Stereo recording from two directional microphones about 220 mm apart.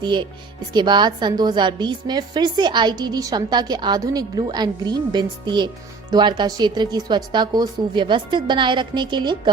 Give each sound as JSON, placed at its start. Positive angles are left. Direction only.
{"t": 0.0, "sound": "a woman's voice", "side_deg": -20}